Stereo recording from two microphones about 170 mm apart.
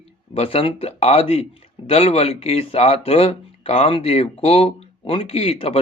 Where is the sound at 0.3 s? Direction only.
35° left (ahead or behind).